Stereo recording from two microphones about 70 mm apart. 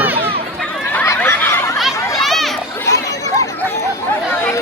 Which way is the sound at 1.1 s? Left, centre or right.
Left.